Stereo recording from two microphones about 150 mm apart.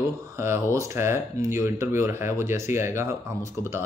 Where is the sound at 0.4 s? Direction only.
15° right (ahead or behind).